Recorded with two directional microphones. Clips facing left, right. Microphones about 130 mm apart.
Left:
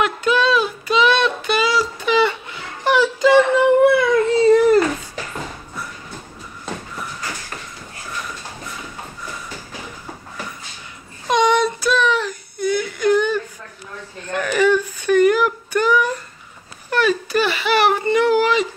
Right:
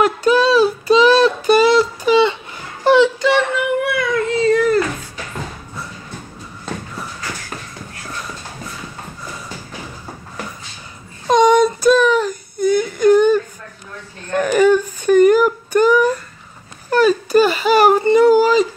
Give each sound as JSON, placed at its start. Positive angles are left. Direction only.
{"t": 0.0, "sound": "child singing", "side_deg": -35}
{"t": 2.0, "sound": "a sound", "side_deg": -30}
{"t": 2.5, "sound": "laughter", "side_deg": -30}
{"t": 3.3, "sound": "baby cry", "side_deg": 25}
{"t": 11.2, "sound": "a sound", "side_deg": -45}
{"t": 16.9, "sound": "whimper", "side_deg": -40}